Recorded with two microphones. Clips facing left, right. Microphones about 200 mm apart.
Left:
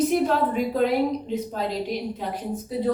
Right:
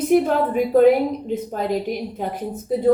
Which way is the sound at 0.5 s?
50° right (ahead or behind).